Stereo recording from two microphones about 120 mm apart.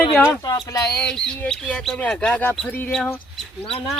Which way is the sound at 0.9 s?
5° left (ahead or behind).